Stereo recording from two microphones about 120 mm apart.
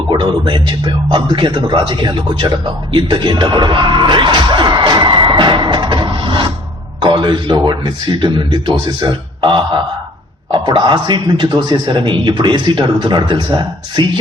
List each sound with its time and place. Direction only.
0.1 s a man's voice: 40° right (ahead or behind)